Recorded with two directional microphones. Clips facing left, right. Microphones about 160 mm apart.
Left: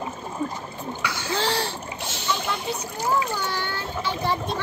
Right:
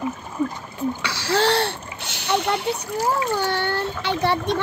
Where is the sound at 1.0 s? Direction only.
75° right (ahead or behind).